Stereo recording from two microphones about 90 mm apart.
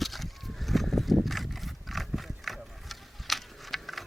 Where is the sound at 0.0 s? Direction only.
Centre (ahead or behind).